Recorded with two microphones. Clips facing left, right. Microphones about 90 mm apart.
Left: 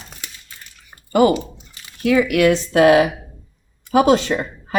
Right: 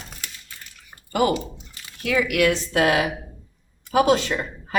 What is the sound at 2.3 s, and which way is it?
Speech, 35° left (ahead or behind).